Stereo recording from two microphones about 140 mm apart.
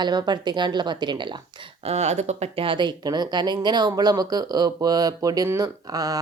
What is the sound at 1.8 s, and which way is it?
Speech, 50° right (ahead or behind).